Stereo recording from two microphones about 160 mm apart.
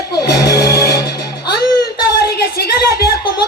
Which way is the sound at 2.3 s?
75° left (ahead or behind).